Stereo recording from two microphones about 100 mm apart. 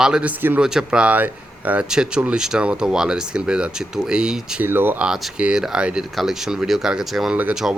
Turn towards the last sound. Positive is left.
turn(degrees=-10)  # may be behind; listen again after turning